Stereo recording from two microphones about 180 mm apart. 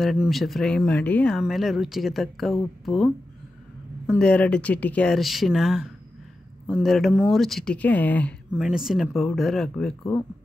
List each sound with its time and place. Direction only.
0.0 s speech: centre (ahead or behind)
4.2 s speech: 5° left (ahead or behind)
8.5 s speech: 5° right (ahead or behind)